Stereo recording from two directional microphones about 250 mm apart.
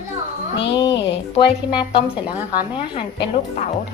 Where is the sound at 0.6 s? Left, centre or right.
Left.